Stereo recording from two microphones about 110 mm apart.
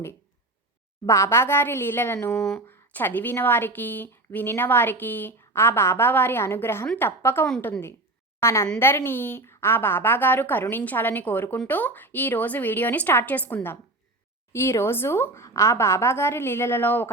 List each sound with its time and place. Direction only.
1.0 s a woman's voice: 25° left (ahead or behind)